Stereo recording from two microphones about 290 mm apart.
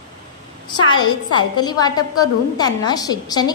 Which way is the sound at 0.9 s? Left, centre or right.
Centre.